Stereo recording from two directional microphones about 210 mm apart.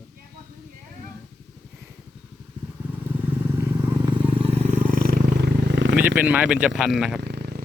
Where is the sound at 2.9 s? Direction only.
10° right (ahead or behind); by 4.8 s 25° right (ahead or behind).